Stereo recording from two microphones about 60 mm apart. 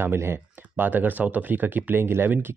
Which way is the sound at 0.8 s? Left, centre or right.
Right.